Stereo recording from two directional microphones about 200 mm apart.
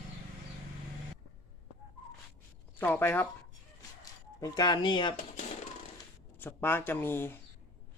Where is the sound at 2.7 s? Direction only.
10° left (ahead or behind).